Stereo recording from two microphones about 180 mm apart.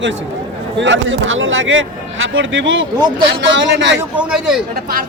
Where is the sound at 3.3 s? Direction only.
80° right.